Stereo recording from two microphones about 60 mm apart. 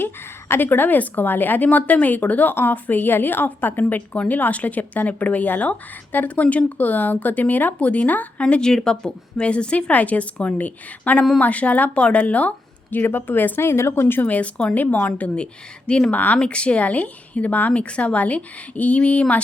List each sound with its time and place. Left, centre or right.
0.0 s a woman's voice: left